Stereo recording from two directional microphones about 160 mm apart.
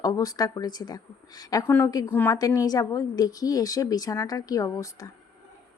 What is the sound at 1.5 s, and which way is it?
A woman's voice, 15° left (ahead or behind).